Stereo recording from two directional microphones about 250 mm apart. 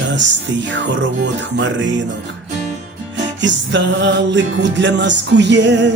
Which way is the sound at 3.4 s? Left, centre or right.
Right.